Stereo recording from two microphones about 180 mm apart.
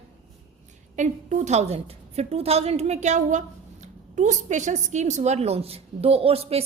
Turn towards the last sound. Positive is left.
turn(degrees=-35)  # may be behind; listen again after turning